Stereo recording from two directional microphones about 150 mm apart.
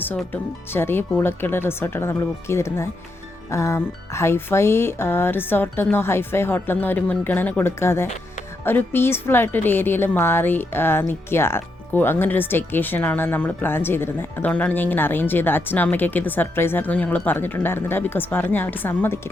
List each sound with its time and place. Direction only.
0.7 s a woman's voice: 15° left (ahead or behind)